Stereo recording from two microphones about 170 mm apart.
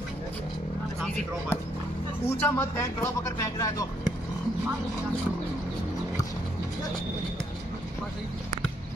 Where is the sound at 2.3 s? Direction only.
15° left (ahead or behind).